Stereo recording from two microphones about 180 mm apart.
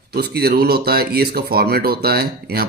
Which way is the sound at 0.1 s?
60° right (ahead or behind).